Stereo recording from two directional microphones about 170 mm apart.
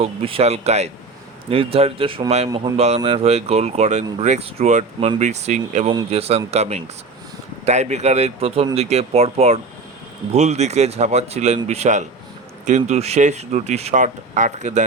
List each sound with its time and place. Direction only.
0.0 s speech: 35° right (ahead or behind)